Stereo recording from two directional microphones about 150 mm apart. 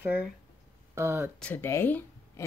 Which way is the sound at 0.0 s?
10° right (ahead or behind).